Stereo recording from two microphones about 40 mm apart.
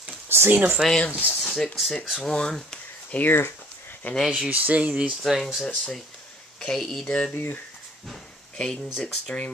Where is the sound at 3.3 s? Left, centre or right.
Left.